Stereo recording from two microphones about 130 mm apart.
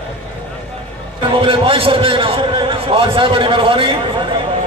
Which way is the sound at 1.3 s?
40° right (ahead or behind).